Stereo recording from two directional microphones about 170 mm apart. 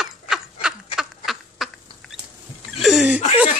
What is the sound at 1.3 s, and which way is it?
Duck, centre (ahead or behind).